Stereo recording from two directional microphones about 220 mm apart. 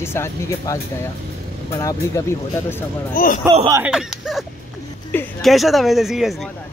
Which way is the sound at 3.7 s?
5° right (ahead or behind).